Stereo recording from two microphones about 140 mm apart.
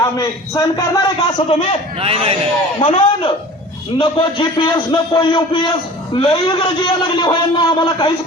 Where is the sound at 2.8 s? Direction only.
40° left (ahead or behind).